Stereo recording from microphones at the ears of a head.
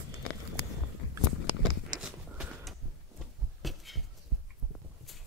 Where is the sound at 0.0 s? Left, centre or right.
Left.